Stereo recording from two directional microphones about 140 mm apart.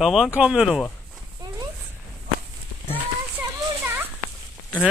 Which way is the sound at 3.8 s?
15° right (ahead or behind).